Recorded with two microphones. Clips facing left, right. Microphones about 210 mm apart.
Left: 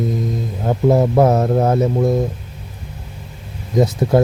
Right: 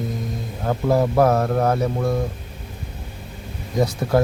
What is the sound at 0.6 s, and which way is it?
Speech, 20° left (ahead or behind).